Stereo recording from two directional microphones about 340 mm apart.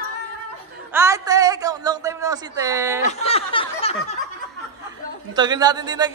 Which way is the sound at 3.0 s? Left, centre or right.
Centre.